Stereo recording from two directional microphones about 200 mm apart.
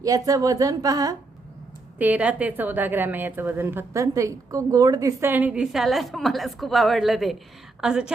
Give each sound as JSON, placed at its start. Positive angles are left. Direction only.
{"t": 0.0, "sound": "a woman's voice", "side_deg": -15}
{"t": 2.0, "sound": "a woman's voice", "side_deg": -5}